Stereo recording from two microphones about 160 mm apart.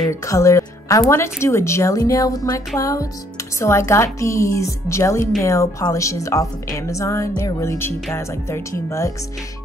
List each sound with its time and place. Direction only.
0.1 s a woman's voice: 20° left (ahead or behind)